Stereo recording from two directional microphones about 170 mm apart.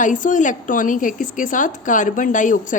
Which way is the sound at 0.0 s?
50° left (ahead or behind).